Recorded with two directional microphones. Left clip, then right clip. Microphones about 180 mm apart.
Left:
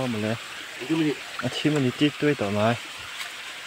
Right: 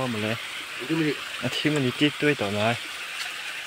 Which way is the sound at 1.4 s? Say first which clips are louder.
Even; 20° left (ahead or behind).